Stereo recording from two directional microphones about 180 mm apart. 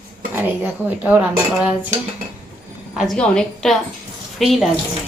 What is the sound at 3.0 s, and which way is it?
A woman's voice, 5° left (ahead or behind).